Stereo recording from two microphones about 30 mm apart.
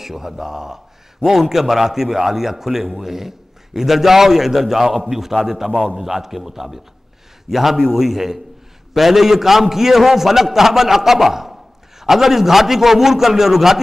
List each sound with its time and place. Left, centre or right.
0.0 s a man's voice: centre